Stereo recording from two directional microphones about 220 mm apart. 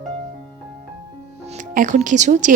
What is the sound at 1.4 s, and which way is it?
Speech, 35° right (ahead or behind).